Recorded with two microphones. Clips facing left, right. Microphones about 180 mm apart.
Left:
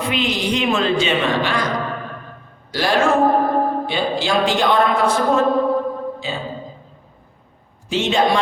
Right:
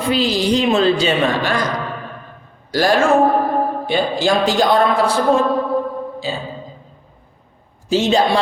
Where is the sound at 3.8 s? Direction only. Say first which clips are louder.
Right 3 dB; 45° right (ahead or behind).